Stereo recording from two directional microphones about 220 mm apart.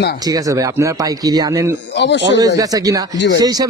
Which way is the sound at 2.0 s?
55° left (ahead or behind).